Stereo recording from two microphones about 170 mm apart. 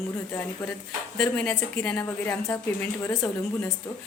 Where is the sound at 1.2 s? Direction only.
10° left (ahead or behind).